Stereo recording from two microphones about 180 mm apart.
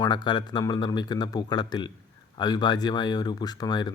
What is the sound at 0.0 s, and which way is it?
Speech, 25° left (ahead or behind).